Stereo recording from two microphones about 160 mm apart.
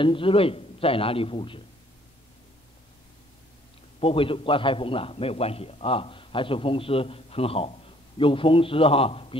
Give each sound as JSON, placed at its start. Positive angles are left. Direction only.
{"t": 0.0, "sound": "a man's voice", "side_deg": 35}
{"t": 4.0, "sound": "a man's voice", "side_deg": 35}